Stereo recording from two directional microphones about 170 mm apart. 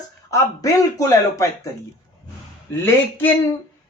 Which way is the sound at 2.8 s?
15° left (ahead or behind).